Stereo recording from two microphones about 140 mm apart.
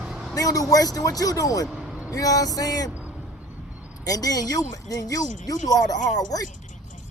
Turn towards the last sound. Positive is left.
turn(degrees=25)  # may be behind; listen again after turning